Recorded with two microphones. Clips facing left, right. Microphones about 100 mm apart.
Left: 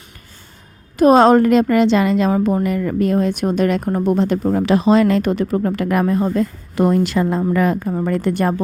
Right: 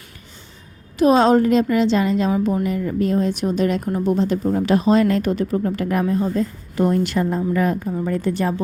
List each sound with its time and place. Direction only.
0.9 s a woman's voice: 55° left (ahead or behind); by 2.3 s 75° left (ahead or behind)
2.3 s a woman's voice: 45° left (ahead or behind)